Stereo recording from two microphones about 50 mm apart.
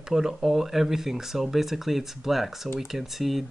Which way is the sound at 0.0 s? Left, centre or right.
Centre.